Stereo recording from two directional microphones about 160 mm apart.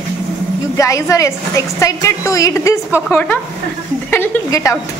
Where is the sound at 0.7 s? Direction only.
20° left (ahead or behind).